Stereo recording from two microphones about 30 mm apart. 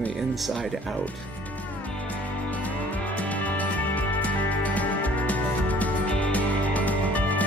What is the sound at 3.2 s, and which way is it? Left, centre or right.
Music, left.